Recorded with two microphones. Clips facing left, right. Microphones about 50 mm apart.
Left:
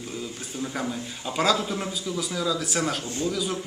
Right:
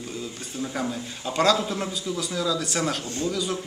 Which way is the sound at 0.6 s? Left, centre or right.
Centre.